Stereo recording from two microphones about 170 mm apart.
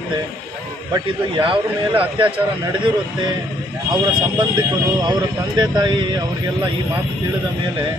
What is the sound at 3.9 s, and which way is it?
Speech, 25° right (ahead or behind).